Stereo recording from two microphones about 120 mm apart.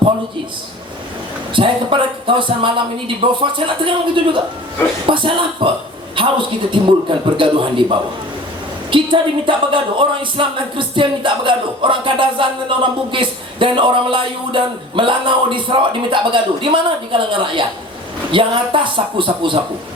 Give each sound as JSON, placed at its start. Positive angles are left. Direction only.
{"t": 1.5, "sound": "a man's voice", "side_deg": -45}